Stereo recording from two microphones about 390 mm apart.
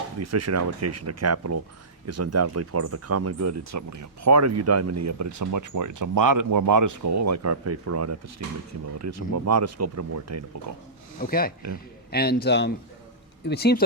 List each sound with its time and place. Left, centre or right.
0.2 s speech: right
11.2 s a man's voice: left